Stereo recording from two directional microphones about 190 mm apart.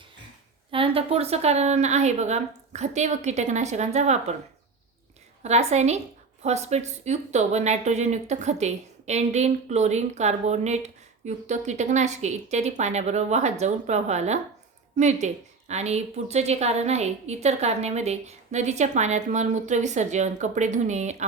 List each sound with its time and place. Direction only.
0.7 s speech: 30° right (ahead or behind)
5.4 s speech: 35° right (ahead or behind)